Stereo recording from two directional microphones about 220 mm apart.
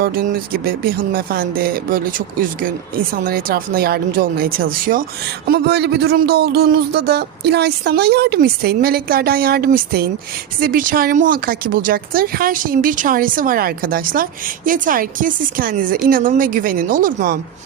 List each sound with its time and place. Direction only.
0.0 s speech: 40° right (ahead or behind)